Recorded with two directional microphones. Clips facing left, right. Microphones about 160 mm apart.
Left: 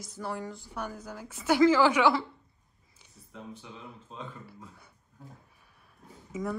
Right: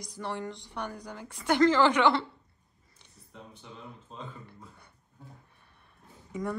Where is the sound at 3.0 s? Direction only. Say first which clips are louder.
Left 4 dB; centre (ahead or behind).